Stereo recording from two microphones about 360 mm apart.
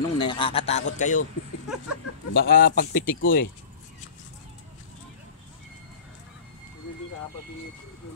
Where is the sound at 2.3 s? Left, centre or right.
Left.